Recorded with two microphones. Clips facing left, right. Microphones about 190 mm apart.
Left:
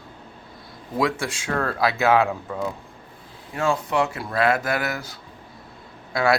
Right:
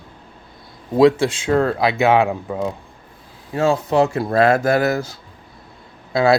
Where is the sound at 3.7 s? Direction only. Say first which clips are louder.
Right 7 dB; 35° right (ahead or behind).